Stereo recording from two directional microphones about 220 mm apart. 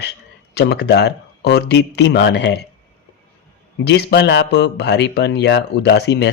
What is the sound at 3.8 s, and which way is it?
Speech, 50° left (ahead or behind).